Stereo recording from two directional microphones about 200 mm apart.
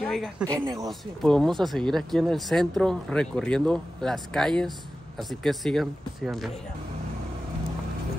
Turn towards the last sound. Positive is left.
turn(degrees=0)  # may be behind; listen again after turning